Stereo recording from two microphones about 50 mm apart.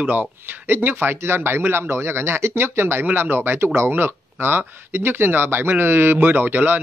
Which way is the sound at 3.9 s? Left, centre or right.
Right.